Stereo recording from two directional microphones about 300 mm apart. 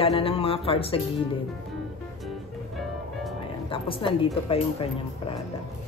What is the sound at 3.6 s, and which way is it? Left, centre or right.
Speech, centre.